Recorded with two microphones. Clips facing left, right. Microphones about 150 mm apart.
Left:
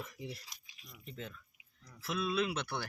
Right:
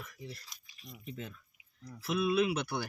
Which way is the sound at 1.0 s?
5° right (ahead or behind).